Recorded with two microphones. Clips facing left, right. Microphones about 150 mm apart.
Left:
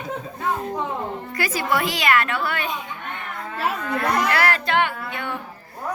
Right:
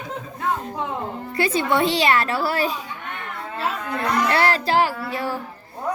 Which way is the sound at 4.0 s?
30° right (ahead or behind).